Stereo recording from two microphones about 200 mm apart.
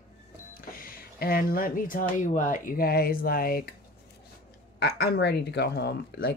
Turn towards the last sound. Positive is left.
turn(degrees=55)  # may be behind; listen again after turning